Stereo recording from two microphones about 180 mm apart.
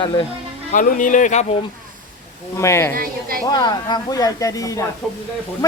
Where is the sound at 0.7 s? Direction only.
50° left (ahead or behind).